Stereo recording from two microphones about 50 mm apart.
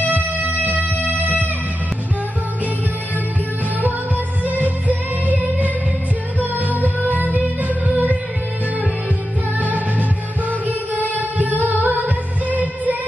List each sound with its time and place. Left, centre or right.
0.4 s music: right
4.5 s music: right
6.7 s music: right
9.6 s music: right
11.1 s singing: right
12.4 s music: right